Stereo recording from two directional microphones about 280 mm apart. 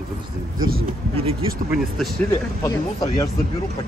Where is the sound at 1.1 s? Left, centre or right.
Centre.